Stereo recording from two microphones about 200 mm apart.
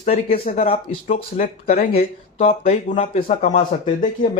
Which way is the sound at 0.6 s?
30° left (ahead or behind).